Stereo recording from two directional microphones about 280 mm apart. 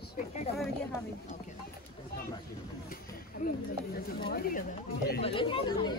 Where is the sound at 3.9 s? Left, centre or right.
Left.